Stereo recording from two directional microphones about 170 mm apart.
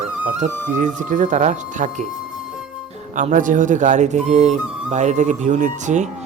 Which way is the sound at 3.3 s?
50° right (ahead or behind).